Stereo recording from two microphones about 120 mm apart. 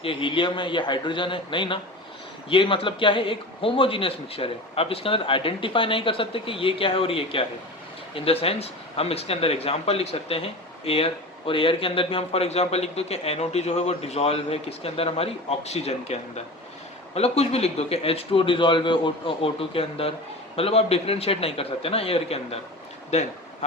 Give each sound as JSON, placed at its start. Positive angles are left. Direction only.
{"t": 0.0, "sound": "a man's voice", "side_deg": 45}
{"t": 17.2, "sound": "a man's voice", "side_deg": 60}